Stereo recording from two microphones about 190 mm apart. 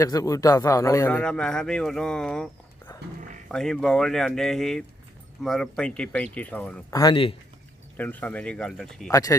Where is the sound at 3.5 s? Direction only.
5° left (ahead or behind).